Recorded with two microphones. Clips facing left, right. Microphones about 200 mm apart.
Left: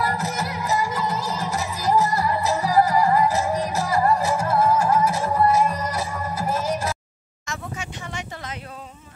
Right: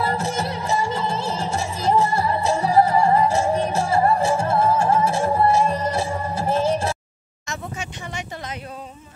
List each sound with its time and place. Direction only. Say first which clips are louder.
0.0 s music: right 2 dB; 30° right (ahead or behind)
7.4 s vehicle: right 1 dB; 20° right (ahead or behind)